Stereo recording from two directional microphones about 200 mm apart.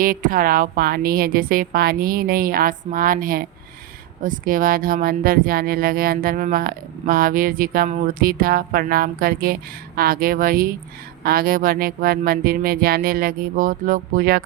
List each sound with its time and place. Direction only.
0.0 s speech: 45° right (ahead or behind)